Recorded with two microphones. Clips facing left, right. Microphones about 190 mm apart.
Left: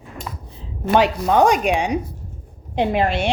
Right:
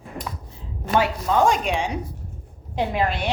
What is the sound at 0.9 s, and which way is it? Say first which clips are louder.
Speech: left 5 dB; 75° left (ahead or behind).